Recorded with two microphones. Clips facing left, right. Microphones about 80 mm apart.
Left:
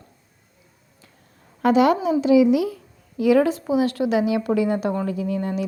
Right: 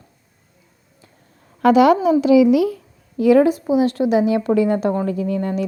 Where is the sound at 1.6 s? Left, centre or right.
Right.